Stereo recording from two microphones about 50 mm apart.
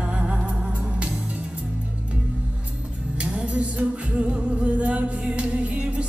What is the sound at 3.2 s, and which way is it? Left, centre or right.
Music, right.